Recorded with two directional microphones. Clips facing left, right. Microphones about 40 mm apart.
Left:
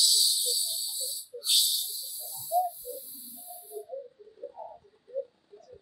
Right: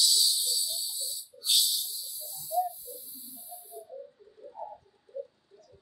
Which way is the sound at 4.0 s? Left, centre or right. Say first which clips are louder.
Left 4 dB; centre.